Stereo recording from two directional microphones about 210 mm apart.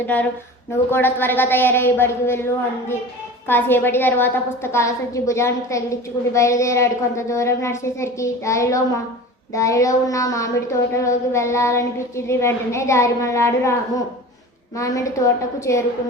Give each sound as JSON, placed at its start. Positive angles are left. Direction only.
{"t": 0.0, "sound": "a woman's voice", "side_deg": 10}